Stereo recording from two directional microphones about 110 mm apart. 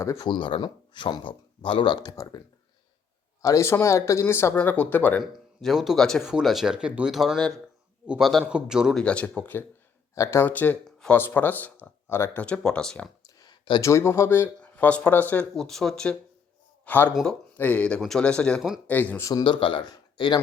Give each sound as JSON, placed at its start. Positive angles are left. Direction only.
{"t": 0.3, "sound": "speech", "side_deg": 50}
{"t": 3.4, "sound": "speech", "side_deg": 30}
{"t": 5.2, "sound": "speech", "side_deg": 0}
{"t": 7.3, "sound": "speech", "side_deg": 10}
{"t": 8.0, "sound": "a man's voice", "side_deg": -10}
{"t": 9.0, "sound": "speech", "side_deg": 10}
{"t": 13.4, "sound": "a sound", "side_deg": 40}
{"t": 13.8, "sound": "speech", "side_deg": 25}
{"t": 15.5, "sound": "speech", "side_deg": 5}
{"t": 16.8, "sound": "speech", "side_deg": 15}
{"t": 19.2, "sound": "speech", "side_deg": 35}
{"t": 19.5, "sound": "speech", "side_deg": 50}